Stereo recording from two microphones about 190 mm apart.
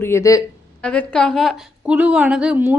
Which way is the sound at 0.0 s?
15° left (ahead or behind).